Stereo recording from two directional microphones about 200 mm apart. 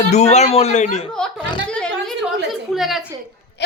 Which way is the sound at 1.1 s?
5° left (ahead or behind).